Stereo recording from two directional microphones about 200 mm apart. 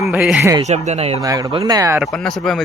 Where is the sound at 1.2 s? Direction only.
20° right (ahead or behind).